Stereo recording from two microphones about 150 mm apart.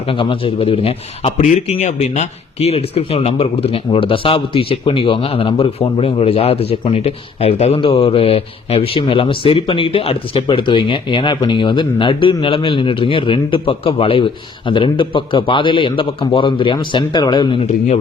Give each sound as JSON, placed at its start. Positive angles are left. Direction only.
{"t": 0.1, "sound": "a man's voice", "side_deg": 35}